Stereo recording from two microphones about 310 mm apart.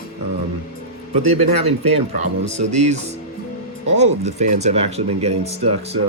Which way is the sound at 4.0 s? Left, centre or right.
Right.